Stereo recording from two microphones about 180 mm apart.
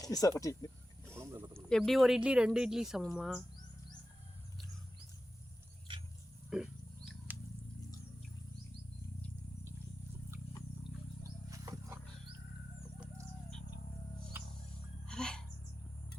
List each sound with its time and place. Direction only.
0.0 s speech: 20° left (ahead or behind)
1.1 s a sound: 15° right (ahead or behind)
1.7 s speech: centre (ahead or behind)
6.5 s wild animals: 5° right (ahead or behind)
11.2 s roaring cats: 15° right (ahead or behind)
15.0 s gasp: 5° left (ahead or behind)